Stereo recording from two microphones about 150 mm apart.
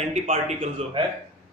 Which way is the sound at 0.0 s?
50° right (ahead or behind).